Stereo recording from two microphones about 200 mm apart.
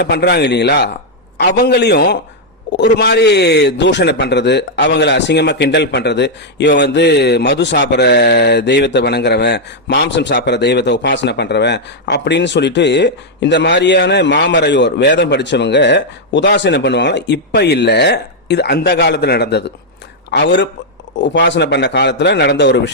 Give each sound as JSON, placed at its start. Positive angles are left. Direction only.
{"t": 0.0, "sound": "a man's voice", "side_deg": 55}